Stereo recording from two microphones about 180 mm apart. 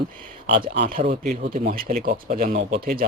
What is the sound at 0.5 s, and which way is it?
Speech, 35° right (ahead or behind).